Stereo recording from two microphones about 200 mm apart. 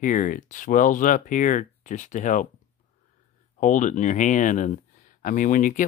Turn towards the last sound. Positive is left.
turn(degrees=40)  # may be behind; listen again after turning